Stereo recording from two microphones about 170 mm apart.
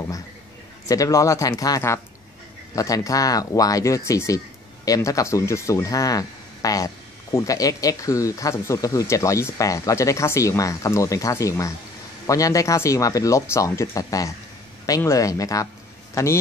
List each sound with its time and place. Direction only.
0.8 s speech: 20° left (ahead or behind)